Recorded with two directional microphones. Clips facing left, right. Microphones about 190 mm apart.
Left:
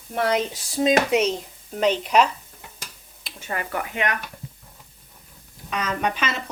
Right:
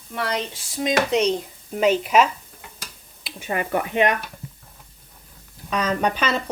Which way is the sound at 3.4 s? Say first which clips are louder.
Right 5 dB; 20° right (ahead or behind).